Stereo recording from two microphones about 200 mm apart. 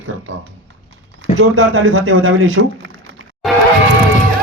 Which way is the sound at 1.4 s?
90° right.